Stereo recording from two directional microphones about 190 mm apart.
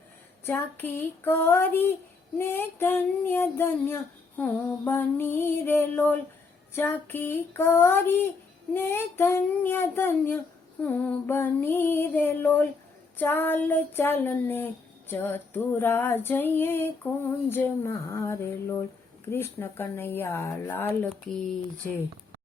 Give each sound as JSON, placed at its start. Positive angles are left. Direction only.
{"t": 0.4, "sound": "female singing", "side_deg": 10}